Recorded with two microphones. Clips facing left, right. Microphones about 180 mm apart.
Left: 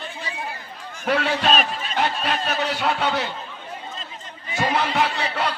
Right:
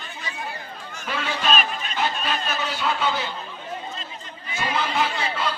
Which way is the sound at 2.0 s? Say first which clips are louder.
Left 3 dB; 65° left (ahead or behind).